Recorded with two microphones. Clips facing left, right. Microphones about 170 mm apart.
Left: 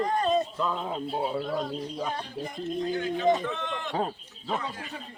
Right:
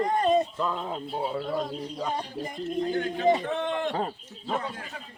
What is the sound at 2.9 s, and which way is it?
Speech, 50° right (ahead or behind).